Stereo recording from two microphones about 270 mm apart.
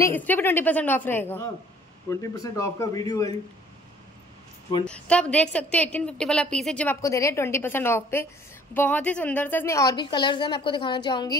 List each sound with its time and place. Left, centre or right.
0.0 s a woman's voice: centre
4.8 s a woman's voice: centre